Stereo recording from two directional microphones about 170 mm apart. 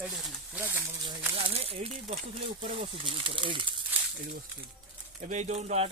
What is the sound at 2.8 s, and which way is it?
Speech, 30° right (ahead or behind).